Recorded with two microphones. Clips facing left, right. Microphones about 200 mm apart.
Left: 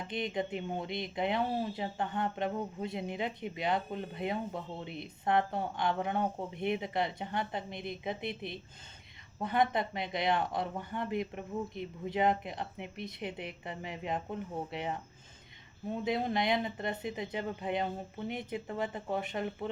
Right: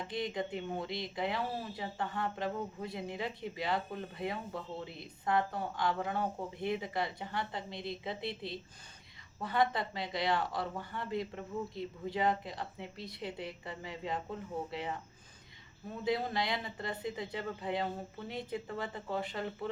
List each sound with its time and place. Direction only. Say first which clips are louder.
0.1 s speech: left 3 dB; 20° left (ahead or behind)
16.0 s speech: left 2 dB; 20° left (ahead or behind)